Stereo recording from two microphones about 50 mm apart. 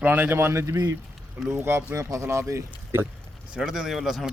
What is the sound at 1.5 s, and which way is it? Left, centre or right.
Speech, right.